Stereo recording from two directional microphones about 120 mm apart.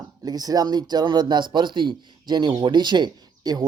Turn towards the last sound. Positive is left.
turn(degrees=-35)  # may be behind; listen again after turning